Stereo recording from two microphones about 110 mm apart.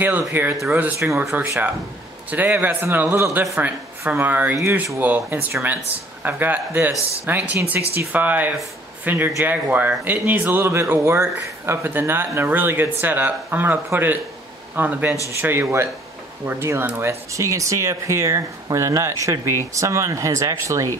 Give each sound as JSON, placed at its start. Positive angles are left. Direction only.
{"t": 0.3, "sound": "speech", "side_deg": -20}